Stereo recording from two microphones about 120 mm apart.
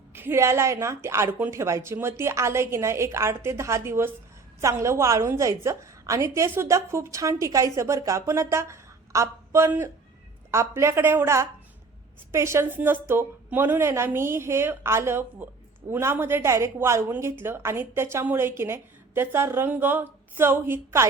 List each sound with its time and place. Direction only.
0.1 s a woman's voice: 20° right (ahead or behind)